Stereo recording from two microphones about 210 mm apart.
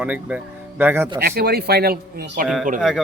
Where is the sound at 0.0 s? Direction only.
5° right (ahead or behind).